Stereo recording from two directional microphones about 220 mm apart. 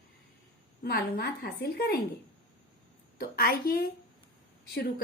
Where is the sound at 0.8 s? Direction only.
50° left (ahead or behind).